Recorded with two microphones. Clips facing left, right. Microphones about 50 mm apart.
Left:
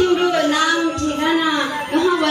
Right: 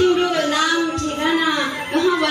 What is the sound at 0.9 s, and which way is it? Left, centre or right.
A woman's voice, centre.